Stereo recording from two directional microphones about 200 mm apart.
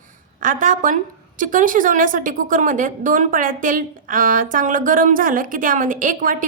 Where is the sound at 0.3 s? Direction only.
40° right (ahead or behind).